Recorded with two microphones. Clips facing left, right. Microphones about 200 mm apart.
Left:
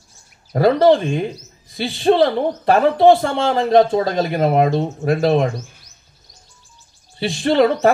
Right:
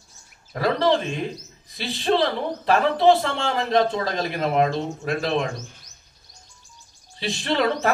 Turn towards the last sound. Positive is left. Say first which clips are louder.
# left 8 dB
turn(degrees=50)  # may be behind; listen again after turning